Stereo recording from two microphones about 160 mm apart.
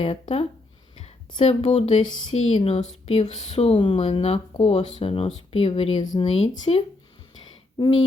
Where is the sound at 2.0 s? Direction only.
30° left (ahead or behind).